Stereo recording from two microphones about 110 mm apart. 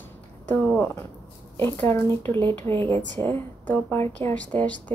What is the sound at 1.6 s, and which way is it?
A woman's voice, 20° left (ahead or behind).